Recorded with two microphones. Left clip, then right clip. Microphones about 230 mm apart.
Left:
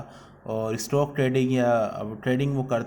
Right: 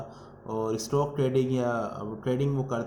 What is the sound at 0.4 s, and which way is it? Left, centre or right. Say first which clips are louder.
Speech: left 2 dB; left.